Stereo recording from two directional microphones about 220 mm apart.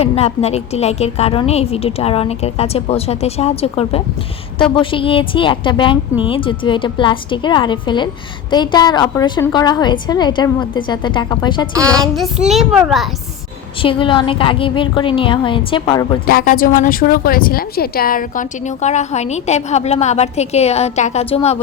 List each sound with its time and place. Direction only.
0.0 s a woman's voice: 30° left (ahead or behind)
11.7 s a child's voice: 5° left (ahead or behind)
13.8 s a woman's voice: 20° left (ahead or behind)
16.2 s a woman's voice: 40° left (ahead or behind)